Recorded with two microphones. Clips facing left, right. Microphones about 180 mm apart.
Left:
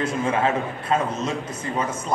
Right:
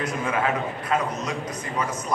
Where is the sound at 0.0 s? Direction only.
25° left (ahead or behind).